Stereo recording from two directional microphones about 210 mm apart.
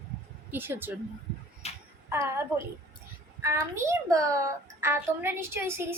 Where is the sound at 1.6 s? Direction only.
30° left (ahead or behind).